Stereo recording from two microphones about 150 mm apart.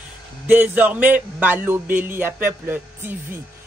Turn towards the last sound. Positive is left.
turn(degrees=-15)  # may be behind; listen again after turning